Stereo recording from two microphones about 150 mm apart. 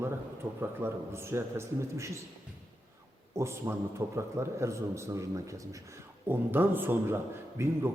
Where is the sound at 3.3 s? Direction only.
20° right (ahead or behind).